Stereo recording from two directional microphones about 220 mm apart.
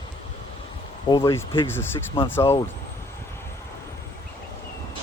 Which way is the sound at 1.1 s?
15° left (ahead or behind).